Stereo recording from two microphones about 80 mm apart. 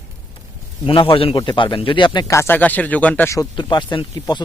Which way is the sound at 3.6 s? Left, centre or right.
Left.